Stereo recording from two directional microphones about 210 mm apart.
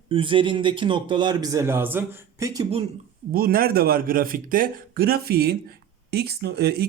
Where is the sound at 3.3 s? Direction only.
45° right (ahead or behind).